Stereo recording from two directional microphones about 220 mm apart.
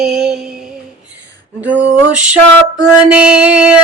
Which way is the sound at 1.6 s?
5° right (ahead or behind).